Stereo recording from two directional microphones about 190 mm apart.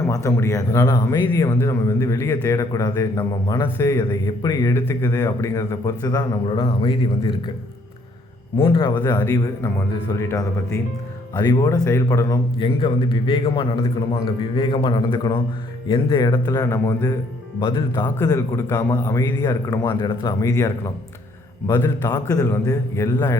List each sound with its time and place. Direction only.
0.1 s speech: 15° left (ahead or behind)
8.5 s a man's voice: 25° left (ahead or behind)
9.0 s a man's voice: 10° left (ahead or behind)